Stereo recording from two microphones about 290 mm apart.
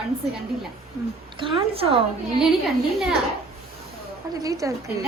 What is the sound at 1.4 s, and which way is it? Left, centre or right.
Speech, centre.